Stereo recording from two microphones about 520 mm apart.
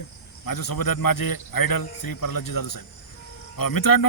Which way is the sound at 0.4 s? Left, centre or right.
Left.